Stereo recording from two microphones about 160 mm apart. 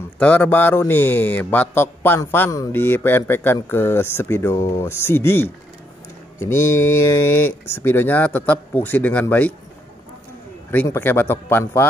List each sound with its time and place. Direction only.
0.2 s a man's voice: 10° left (ahead or behind)
10.7 s a man's voice: 10° left (ahead or behind)